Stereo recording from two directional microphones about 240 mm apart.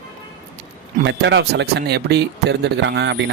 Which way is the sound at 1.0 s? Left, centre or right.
Right.